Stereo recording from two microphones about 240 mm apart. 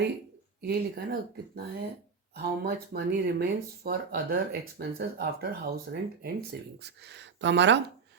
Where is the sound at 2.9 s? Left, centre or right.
Right.